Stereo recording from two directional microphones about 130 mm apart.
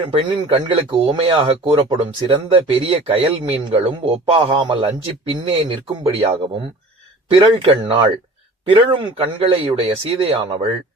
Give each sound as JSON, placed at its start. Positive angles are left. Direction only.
{"t": 0.1, "sound": "speech", "side_deg": -45}
{"t": 7.3, "sound": "speech", "side_deg": -40}